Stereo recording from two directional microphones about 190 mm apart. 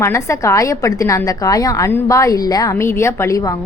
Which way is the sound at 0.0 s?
15° left (ahead or behind).